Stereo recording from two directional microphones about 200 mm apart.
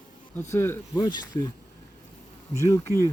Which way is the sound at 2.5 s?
15° left (ahead or behind).